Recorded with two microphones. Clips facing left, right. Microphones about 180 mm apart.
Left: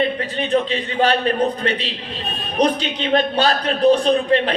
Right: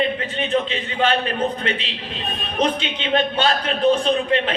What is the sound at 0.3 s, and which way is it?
Speech, 35° left (ahead or behind).